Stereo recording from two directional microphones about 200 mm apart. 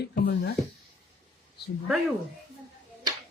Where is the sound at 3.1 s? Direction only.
20° right (ahead or behind).